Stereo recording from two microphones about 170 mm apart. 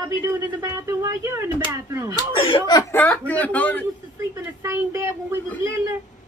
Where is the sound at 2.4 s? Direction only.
30° left (ahead or behind).